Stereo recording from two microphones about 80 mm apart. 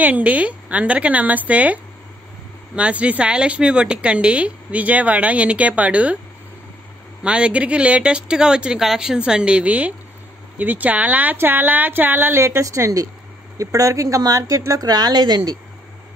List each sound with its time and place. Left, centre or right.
0.0 s a woman's voice: centre
7.2 s a woman's voice: centre; by 15.5 s right